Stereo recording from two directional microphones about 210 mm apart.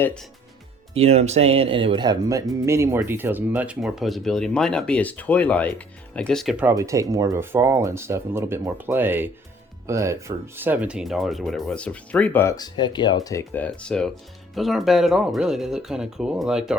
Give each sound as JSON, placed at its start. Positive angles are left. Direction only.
{"t": 0.0, "sound": "speech", "side_deg": 5}
{"t": 0.9, "sound": "speech", "side_deg": -30}